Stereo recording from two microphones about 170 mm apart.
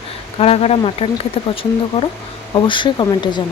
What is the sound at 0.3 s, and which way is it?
Speech, 35° left (ahead or behind).